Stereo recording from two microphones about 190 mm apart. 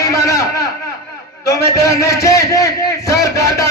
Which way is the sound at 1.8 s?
15° left (ahead or behind).